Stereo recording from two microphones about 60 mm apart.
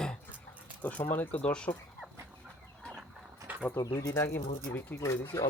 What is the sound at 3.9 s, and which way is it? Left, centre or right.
Speech, left.